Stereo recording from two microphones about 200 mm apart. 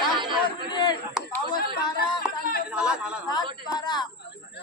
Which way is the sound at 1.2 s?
5° right (ahead or behind).